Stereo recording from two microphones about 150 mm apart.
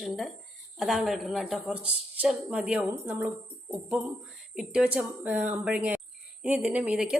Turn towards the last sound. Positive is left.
turn(degrees=-10)  # may be behind; listen again after turning